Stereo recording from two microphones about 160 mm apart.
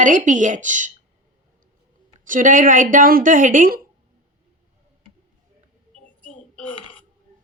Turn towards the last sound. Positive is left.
turn(degrees=10)  # may be behind; listen again after turning